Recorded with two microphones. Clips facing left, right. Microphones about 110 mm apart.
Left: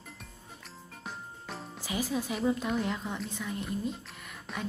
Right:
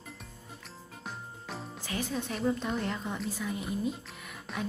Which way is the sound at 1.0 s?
Centre (ahead or behind).